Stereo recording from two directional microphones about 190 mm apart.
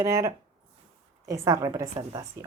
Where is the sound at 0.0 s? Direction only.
15° right (ahead or behind).